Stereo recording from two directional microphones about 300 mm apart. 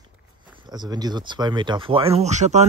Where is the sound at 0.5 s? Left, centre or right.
Centre.